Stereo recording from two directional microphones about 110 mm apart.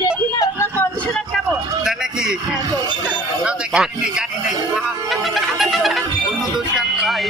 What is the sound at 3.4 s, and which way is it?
Speech, 5° right (ahead or behind).